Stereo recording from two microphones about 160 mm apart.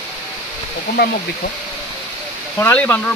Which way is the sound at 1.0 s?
90° left.